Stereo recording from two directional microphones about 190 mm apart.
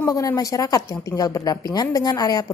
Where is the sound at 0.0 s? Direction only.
15° left (ahead or behind).